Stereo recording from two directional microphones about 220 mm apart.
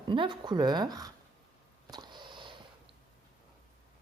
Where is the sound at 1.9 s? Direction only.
20° right (ahead or behind).